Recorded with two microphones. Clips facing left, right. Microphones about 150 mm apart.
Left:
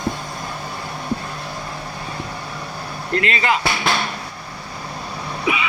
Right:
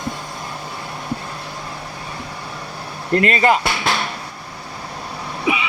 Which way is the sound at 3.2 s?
45° right (ahead or behind).